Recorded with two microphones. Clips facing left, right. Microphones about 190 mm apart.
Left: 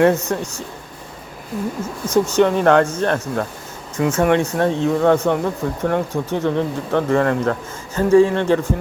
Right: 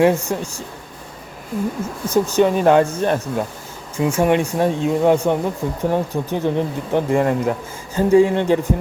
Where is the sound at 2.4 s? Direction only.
15° right (ahead or behind).